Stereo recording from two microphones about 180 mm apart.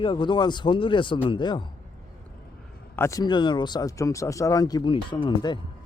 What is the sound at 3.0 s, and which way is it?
Speech, 15° left (ahead or behind).